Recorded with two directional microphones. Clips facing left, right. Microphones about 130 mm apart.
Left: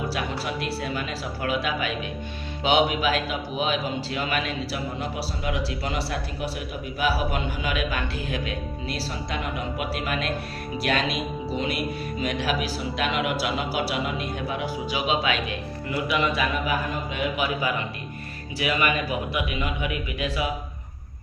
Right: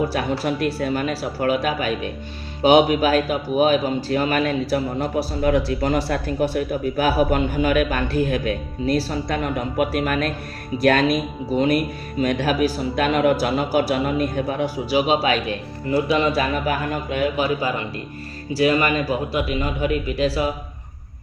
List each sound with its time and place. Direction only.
0.1 s a man's voice: 45° right (ahead or behind)
16.6 s a man's voice: 50° right (ahead or behind)
17.3 s a man's voice: 35° right (ahead or behind)